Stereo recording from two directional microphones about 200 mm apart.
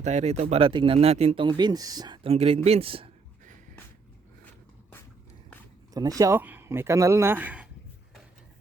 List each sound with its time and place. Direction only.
0.0 s speech: 35° right (ahead or behind)
5.9 s speech: 20° right (ahead or behind)